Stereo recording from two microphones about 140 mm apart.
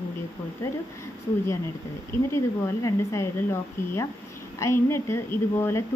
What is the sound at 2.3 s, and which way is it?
Speech, 20° left (ahead or behind).